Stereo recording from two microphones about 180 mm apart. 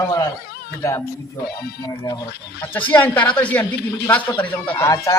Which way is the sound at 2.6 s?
10° left (ahead or behind).